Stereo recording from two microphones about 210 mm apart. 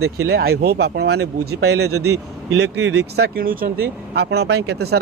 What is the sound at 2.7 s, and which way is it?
Speech, 55° right (ahead or behind).